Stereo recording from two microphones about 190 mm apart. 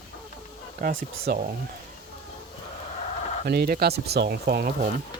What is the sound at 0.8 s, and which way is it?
Speech, 45° right (ahead or behind).